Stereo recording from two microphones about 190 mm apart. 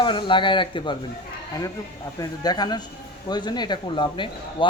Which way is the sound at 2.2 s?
20° left (ahead or behind).